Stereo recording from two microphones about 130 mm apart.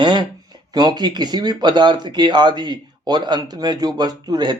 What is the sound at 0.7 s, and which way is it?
Speech, 30° right (ahead or behind).